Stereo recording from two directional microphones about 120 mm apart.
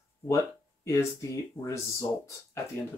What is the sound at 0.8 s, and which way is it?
Speech, 25° left (ahead or behind).